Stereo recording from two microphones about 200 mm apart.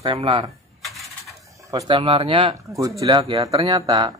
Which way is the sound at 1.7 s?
20° right (ahead or behind).